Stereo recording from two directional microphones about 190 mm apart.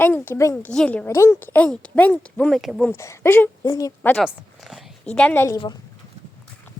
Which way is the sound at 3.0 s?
15° left (ahead or behind).